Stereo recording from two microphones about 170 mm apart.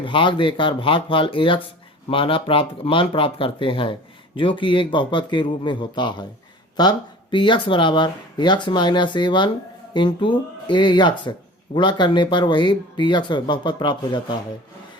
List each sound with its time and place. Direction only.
0.0 s speech: 30° left (ahead or behind)